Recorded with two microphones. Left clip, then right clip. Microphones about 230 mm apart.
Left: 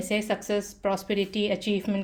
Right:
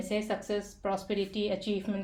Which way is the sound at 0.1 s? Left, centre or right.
Left.